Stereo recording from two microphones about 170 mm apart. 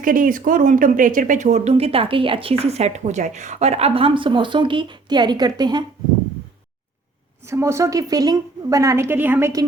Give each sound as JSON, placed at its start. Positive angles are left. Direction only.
{"t": 0.0, "sound": "speech", "side_deg": -55}
{"t": 7.4, "sound": "a woman's voice", "side_deg": -15}